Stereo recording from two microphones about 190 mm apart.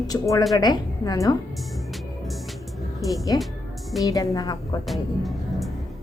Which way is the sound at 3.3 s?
20° left (ahead or behind).